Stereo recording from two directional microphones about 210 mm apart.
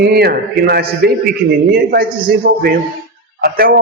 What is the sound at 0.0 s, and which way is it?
A man's voice, 50° right (ahead or behind).